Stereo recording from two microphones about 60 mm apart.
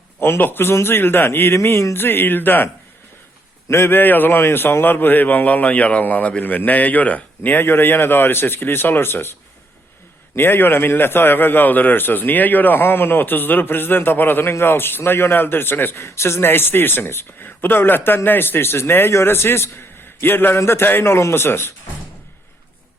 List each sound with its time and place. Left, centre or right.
0.2 s a man's voice: left
1.5 s a man's voice: left
3.7 s a man's voice: left
10.3 s a man's voice: left
20.5 s a man's voice: left